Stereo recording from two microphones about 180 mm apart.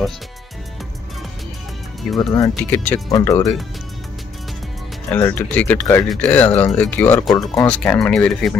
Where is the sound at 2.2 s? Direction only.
20° left (ahead or behind).